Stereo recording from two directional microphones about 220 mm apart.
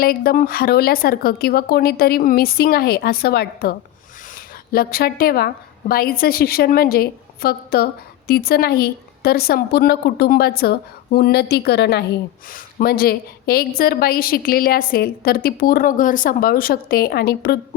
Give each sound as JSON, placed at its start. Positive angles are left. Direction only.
{"t": 0.0, "sound": "a woman's voice", "side_deg": 45}